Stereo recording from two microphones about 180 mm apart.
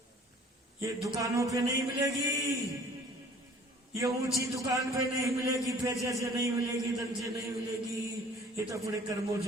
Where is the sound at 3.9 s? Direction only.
15° right (ahead or behind).